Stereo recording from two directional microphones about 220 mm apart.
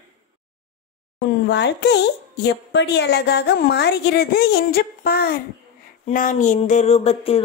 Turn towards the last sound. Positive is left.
turn(degrees=25)  # may be behind; listen again after turning